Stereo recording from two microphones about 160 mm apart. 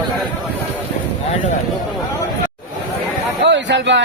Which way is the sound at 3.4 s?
90° right.